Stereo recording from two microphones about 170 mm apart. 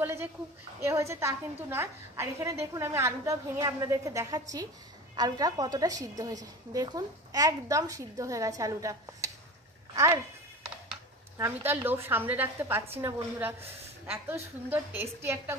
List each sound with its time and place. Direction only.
0.0 s a woman's voice: 10° right (ahead or behind)
11.3 s a woman's voice: 15° right (ahead or behind)